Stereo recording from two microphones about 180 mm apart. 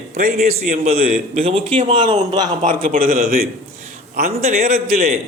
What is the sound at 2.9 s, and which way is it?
Speech, 50° right (ahead or behind).